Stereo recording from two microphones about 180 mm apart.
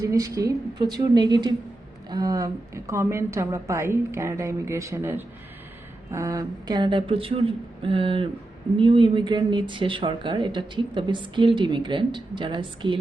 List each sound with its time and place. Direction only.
0.0 s a woman's voice: 20° right (ahead or behind)